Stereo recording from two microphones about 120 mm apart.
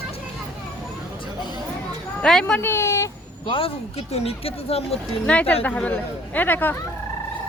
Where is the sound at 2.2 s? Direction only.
5° left (ahead or behind).